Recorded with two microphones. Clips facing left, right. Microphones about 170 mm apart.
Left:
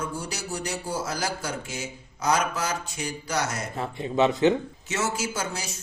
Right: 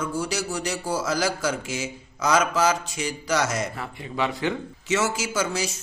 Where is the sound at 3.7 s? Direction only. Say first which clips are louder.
Left 5 dB; 25° left (ahead or behind).